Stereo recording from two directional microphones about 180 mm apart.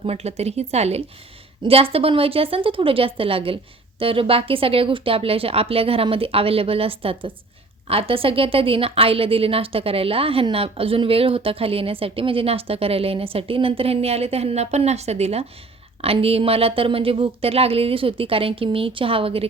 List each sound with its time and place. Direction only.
0.0 s a woman's voice: 35° right (ahead or behind)